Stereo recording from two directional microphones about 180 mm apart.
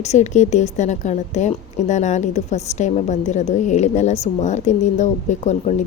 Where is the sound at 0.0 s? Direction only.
40° left (ahead or behind).